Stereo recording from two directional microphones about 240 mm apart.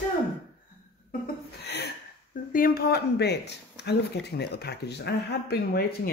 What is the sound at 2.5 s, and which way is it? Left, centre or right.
Speech, left.